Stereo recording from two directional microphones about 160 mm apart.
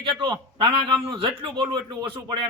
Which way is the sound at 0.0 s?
30° right (ahead or behind).